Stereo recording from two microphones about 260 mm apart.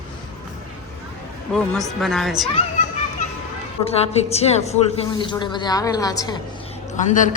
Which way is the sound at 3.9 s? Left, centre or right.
Left.